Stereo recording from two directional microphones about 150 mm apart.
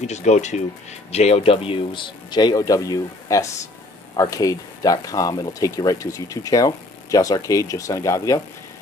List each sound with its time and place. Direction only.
0.0 s speech: 50° left (ahead or behind); by 8.4 s 20° left (ahead or behind)